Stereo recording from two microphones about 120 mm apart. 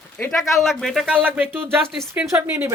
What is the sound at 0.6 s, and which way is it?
Speech, centre (ahead or behind).